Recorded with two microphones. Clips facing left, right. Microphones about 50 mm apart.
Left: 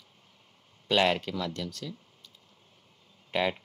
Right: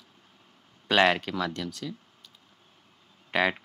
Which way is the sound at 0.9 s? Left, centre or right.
Right.